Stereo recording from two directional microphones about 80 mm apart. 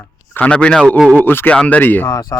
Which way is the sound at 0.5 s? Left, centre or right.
Centre.